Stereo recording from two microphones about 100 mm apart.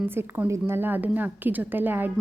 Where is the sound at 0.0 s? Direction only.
20° right (ahead or behind).